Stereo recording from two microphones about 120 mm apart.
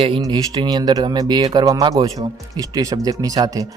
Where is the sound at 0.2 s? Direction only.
35° right (ahead or behind).